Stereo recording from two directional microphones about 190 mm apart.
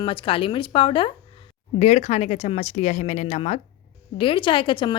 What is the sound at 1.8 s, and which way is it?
A woman's voice, 35° left (ahead or behind).